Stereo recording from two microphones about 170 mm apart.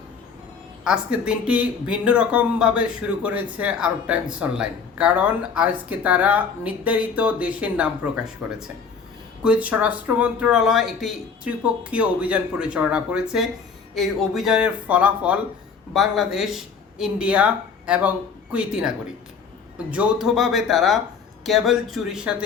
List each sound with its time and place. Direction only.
0.9 s speech: 5° right (ahead or behind)